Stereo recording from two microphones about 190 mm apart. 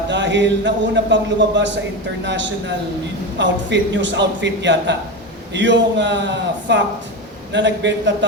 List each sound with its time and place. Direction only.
0.1 s a man's voice: 70° right (ahead or behind)